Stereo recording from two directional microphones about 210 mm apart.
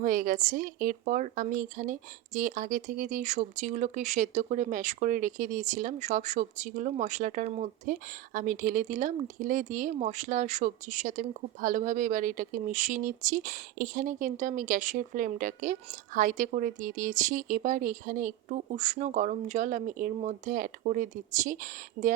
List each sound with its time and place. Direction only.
0.0 s speech: 40° right (ahead or behind)